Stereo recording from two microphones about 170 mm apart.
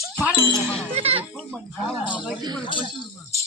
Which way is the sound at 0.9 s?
35° right (ahead or behind).